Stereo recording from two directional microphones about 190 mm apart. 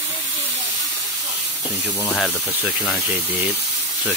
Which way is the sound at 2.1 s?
Centre (ahead or behind).